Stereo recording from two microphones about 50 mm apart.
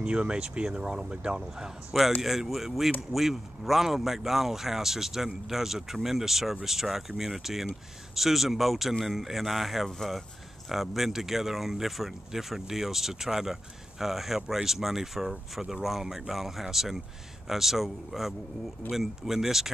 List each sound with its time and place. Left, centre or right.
0.0 s speech: right
2.2 s speech: centre